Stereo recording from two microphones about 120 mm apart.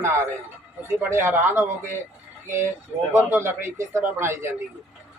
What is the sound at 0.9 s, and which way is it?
Speech, 20° right (ahead or behind).